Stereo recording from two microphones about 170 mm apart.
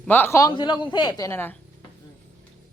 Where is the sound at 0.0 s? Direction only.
10° left (ahead or behind).